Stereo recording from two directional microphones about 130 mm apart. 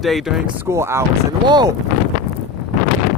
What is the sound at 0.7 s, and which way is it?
Speech, 20° right (ahead or behind).